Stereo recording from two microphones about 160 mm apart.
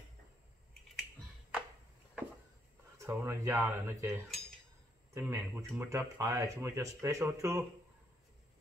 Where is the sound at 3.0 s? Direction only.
15° right (ahead or behind).